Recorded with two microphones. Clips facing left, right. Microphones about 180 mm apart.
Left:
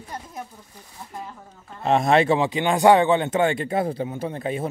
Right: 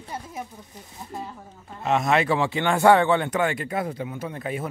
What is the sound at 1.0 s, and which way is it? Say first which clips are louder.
Speech: right 3 dB; 20° right (ahead or behind).